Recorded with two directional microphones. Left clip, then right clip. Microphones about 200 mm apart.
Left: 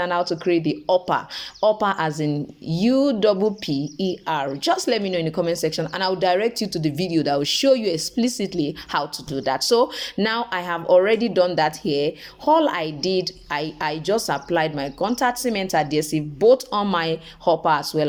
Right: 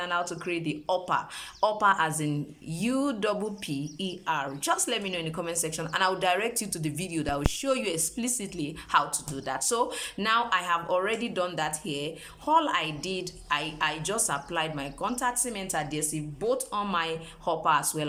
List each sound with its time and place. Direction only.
0.0 s a woman's voice: 25° left (ahead or behind)